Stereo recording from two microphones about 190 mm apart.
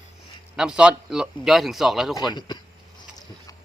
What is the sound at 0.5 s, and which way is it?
A man's voice, 5° right (ahead or behind).